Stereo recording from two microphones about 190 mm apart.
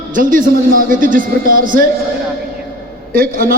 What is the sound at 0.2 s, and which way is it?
A man's voice, 45° right (ahead or behind).